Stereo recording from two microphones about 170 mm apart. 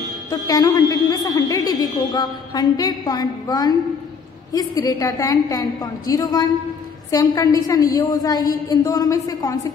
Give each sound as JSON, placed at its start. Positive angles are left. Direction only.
{"t": 0.3, "sound": "a woman's voice", "side_deg": 20}